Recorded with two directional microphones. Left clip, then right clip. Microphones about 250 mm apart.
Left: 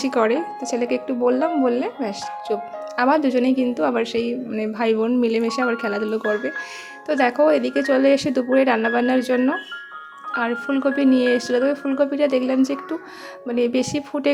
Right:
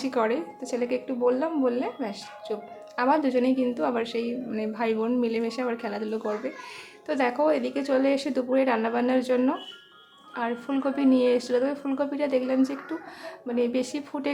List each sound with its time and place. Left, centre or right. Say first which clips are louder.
0.0 s speech: left 6 dB; left